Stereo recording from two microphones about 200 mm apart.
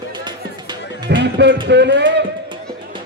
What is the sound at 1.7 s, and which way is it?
Speech, 60° right (ahead or behind).